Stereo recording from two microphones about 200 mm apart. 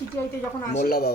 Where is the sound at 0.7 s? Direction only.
50° left (ahead or behind).